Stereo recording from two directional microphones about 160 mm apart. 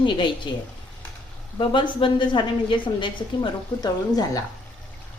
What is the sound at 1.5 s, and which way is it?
A woman's voice, 30° left (ahead or behind).